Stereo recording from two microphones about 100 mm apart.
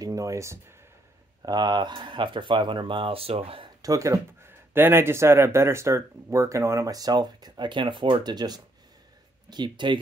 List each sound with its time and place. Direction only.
0.0 s speech: 35° right (ahead or behind)
1.4 s speech: 40° right (ahead or behind); by 3.7 s 65° right (ahead or behind)
3.8 s speech: 35° right (ahead or behind)